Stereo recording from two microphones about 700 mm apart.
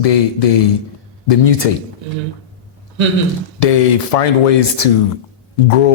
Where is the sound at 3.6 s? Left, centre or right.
Left.